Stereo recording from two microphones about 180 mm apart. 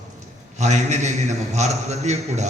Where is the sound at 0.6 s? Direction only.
40° right (ahead or behind).